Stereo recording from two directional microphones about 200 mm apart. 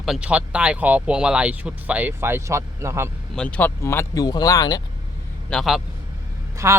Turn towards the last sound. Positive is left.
turn(degrees=-15)  # may be behind; listen again after turning